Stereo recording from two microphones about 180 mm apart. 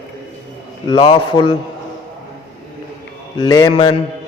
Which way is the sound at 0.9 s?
25° left (ahead or behind).